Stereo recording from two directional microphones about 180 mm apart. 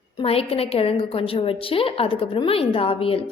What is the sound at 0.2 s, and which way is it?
A woman's voice, 30° left (ahead or behind).